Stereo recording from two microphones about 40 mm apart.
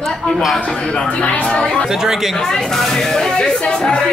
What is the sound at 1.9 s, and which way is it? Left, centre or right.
Speech, centre.